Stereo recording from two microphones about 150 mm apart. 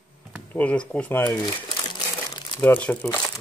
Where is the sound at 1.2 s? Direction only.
30° left (ahead or behind).